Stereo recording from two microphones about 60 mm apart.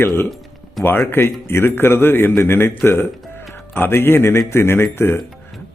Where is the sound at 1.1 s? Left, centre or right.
Left.